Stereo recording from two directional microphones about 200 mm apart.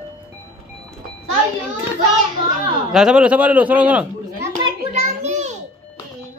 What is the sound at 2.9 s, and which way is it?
A man's voice, 5° right (ahead or behind).